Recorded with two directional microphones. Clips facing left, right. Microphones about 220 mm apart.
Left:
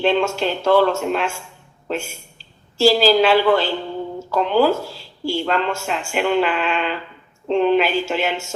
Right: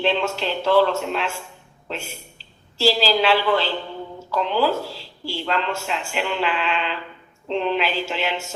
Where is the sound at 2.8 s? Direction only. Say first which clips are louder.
Left 5 dB; 50° left (ahead or behind).